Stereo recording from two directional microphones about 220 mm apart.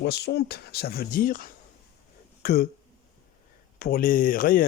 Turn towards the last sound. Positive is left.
turn(degrees=40)  # may be behind; listen again after turning